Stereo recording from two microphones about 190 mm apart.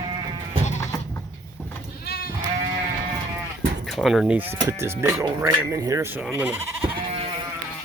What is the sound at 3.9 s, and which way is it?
Speech, centre (ahead or behind).